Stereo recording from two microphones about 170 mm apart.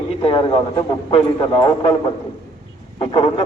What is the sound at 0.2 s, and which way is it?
A man's voice, 25° left (ahead or behind).